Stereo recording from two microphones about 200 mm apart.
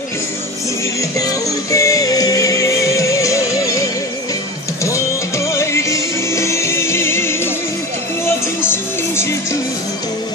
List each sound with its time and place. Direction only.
1.7 s music: 15° left (ahead or behind)
8.5 s music: 10° left (ahead or behind)